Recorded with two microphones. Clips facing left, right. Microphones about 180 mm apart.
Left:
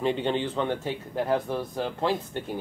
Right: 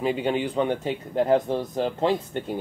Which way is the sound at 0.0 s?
5° right (ahead or behind).